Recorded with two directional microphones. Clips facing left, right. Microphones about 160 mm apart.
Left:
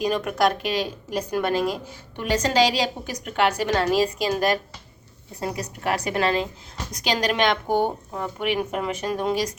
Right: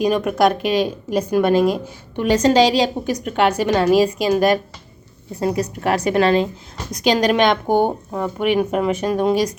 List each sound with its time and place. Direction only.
0.0 s a woman's voice: 20° right (ahead or behind)
5.4 s a woman's voice: 25° right (ahead or behind)